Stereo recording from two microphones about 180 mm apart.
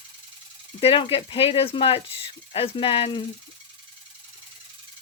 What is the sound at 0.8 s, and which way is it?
Speech, 30° left (ahead or behind).